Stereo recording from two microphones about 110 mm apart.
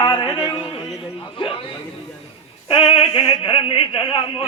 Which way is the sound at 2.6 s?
55° left (ahead or behind).